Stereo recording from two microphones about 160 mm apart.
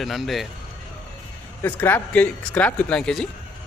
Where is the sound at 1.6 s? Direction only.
10° left (ahead or behind).